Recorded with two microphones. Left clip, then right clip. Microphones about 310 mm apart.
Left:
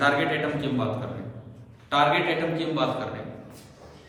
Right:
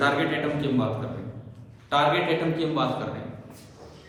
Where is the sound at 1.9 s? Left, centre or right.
Centre.